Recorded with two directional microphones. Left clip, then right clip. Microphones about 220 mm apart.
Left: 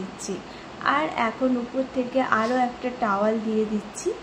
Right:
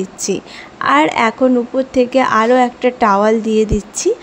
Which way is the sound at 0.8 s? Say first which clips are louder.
Right 11 dB; 45° right (ahead or behind).